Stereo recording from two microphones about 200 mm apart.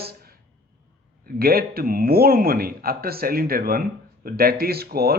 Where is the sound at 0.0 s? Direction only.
50° right (ahead or behind).